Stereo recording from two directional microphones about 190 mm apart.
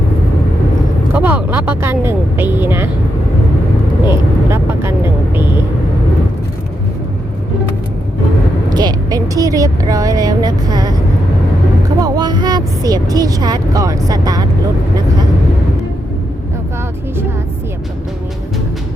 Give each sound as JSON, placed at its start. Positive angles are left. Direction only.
{"t": 1.1, "sound": "vehicle", "side_deg": -10}
{"t": 4.1, "sound": "vehicle", "side_deg": -15}
{"t": 8.7, "sound": "a sound", "side_deg": -20}
{"t": 11.9, "sound": "vehicle", "side_deg": -20}